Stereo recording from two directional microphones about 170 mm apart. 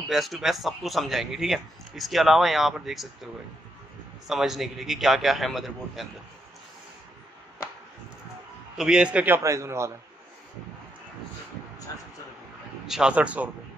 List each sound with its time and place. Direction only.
0.1 s speech: centre (ahead or behind)
4.3 s speech: centre (ahead or behind)
8.7 s a man's voice: 5° right (ahead or behind)
12.8 s a man's voice: 5° right (ahead or behind)